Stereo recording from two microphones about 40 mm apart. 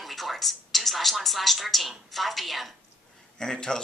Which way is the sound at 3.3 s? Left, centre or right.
Centre.